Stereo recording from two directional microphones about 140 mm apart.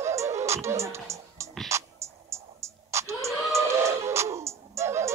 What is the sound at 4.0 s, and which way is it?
Music, 20° right (ahead or behind).